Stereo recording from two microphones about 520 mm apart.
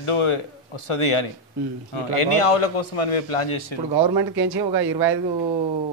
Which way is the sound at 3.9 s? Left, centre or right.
Right.